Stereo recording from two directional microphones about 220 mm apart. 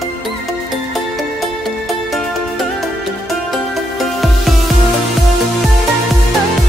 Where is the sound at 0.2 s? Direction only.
Centre (ahead or behind).